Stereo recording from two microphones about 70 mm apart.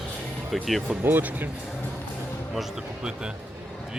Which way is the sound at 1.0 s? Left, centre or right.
Right.